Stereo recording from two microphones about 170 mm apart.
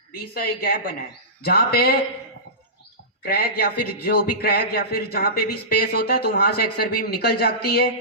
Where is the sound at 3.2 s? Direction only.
65° left (ahead or behind).